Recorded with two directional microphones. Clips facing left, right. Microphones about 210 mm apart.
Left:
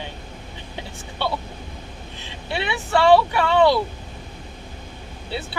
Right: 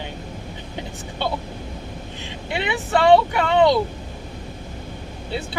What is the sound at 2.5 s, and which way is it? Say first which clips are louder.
Speech: right 1 dB; 20° right (ahead or behind).